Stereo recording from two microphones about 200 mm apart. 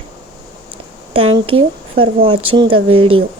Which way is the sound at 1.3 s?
25° right (ahead or behind).